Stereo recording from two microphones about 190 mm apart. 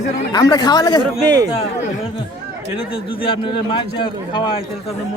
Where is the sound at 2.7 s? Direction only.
30° left (ahead or behind).